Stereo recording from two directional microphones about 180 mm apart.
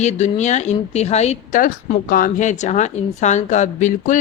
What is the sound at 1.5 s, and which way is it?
A woman's voice, 50° left (ahead or behind).